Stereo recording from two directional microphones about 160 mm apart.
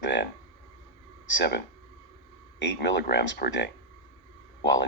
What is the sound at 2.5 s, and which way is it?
Speech, 90° left.